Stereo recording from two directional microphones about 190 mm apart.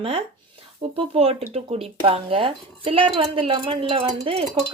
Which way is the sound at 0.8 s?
30° right (ahead or behind).